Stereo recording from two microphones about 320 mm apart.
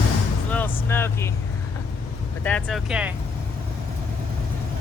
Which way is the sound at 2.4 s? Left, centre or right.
Centre.